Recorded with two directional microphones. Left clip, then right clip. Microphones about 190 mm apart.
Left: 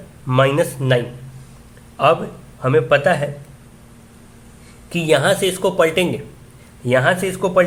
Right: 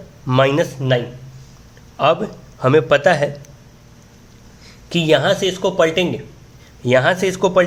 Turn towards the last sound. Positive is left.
turn(degrees=-20)  # may be behind; listen again after turning